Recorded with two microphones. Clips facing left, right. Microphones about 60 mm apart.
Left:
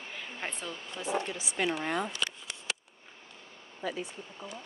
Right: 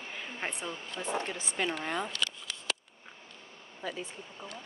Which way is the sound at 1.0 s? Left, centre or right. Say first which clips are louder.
Left 2 dB; right.